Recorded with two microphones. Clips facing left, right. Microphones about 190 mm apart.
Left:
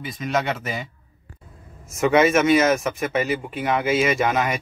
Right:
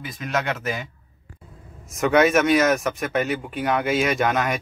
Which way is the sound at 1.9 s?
Centre (ahead or behind).